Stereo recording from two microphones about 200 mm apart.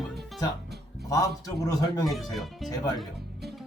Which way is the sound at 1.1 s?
15° left (ahead or behind).